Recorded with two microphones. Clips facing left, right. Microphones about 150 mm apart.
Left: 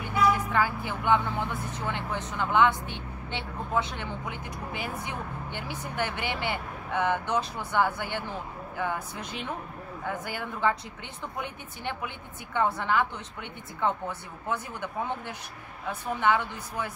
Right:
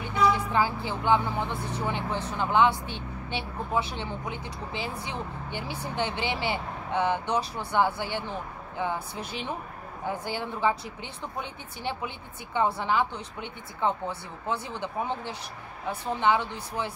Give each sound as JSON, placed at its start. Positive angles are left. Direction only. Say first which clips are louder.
{"t": 0.5, "sound": "speech", "louder": "right 1 dB", "side_deg": -25}
{"t": 2.9, "sound": "vehicle", "louder": "right 2 dB", "side_deg": 20}
{"t": 3.7, "sound": "speech", "louder": "even", "side_deg": -20}